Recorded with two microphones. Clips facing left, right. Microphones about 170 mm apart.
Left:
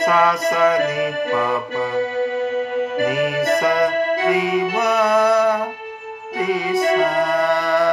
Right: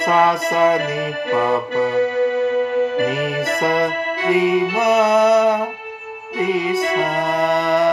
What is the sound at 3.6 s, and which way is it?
Music, 30° right (ahead or behind).